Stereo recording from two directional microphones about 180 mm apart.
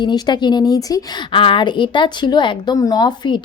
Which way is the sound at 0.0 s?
25° left (ahead or behind).